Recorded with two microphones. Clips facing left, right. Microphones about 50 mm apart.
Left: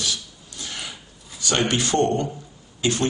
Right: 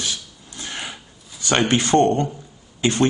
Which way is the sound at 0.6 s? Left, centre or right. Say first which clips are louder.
Right 3 dB; right.